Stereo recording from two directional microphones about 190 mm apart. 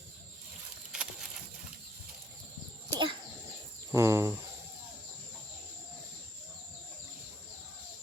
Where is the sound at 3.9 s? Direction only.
15° right (ahead or behind).